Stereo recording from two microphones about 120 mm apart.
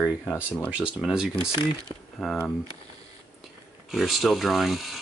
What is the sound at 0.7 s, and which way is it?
Speech, 5° right (ahead or behind).